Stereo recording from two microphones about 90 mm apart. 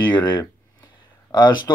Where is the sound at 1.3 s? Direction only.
50° left (ahead or behind).